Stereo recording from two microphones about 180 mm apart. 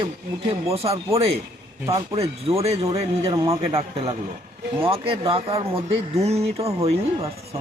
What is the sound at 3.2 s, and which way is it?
Speech, 20° right (ahead or behind).